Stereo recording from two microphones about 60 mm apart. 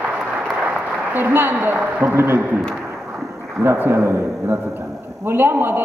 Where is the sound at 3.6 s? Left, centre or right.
Right.